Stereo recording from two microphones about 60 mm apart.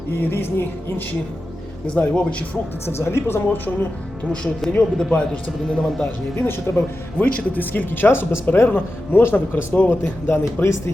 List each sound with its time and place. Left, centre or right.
0.2 s speech: left
1.9 s speech: centre
2.8 s speech: left
4.3 s a man's voice: centre
6.3 s speech: left
9.7 s speech: left
10.0 s speech: left
10.6 s speech: left